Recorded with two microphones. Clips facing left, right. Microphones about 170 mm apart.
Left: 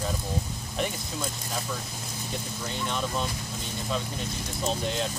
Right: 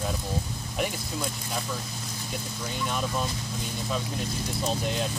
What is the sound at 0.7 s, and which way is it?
Speech, centre (ahead or behind).